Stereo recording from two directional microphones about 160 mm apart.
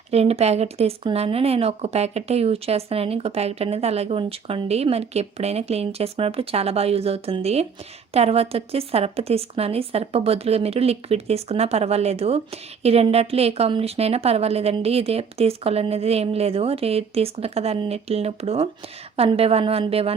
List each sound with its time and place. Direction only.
0.1 s a woman's voice: 40° right (ahead or behind)